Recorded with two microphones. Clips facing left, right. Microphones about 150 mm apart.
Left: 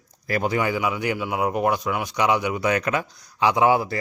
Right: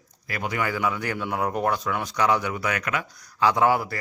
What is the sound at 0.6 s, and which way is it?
A man's voice, 15° left (ahead or behind).